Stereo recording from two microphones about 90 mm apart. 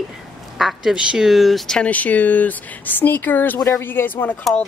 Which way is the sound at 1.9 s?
15° left (ahead or behind).